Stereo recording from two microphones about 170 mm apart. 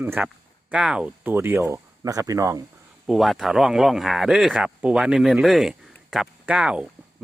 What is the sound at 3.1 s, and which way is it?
A man's voice, centre (ahead or behind).